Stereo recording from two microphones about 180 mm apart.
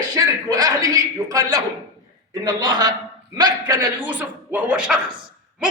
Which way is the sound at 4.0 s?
10° right (ahead or behind).